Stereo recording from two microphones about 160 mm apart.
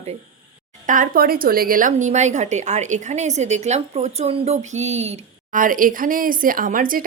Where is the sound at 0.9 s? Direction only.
60° right (ahead or behind).